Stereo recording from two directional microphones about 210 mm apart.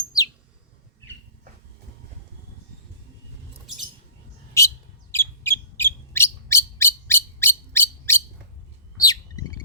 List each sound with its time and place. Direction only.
4.6 s bird: 15° left (ahead or behind)